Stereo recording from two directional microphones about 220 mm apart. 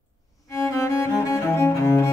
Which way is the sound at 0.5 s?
15° left (ahead or behind).